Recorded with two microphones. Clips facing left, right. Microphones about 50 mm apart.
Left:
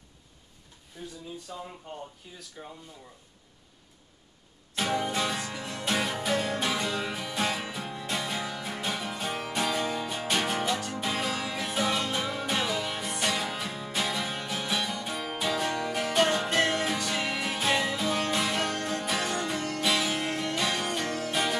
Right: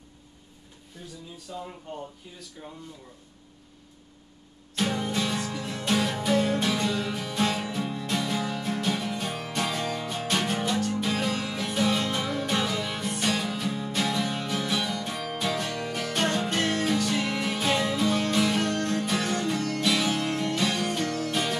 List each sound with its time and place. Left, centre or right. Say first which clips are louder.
1.0 s a sound: left 3 dB; centre
2.6 s speech: even; centre
4.7 s music: right 1 dB; centre